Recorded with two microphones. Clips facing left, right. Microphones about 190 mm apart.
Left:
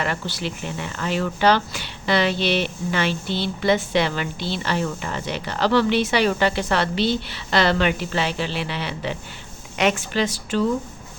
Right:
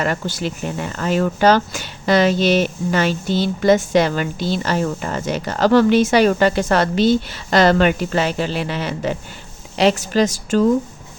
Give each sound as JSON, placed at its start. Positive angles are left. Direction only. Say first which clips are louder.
{"t": 0.0, "sound": "a woman's voice", "louder": "right 5 dB", "side_deg": -45}